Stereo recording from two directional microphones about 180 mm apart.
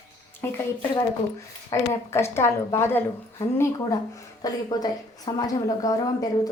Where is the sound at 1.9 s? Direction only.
15° left (ahead or behind).